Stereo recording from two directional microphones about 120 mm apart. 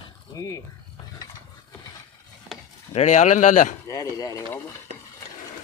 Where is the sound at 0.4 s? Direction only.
25° left (ahead or behind).